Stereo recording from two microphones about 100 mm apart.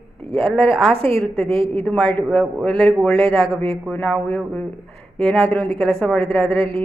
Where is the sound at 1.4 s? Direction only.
65° right (ahead or behind).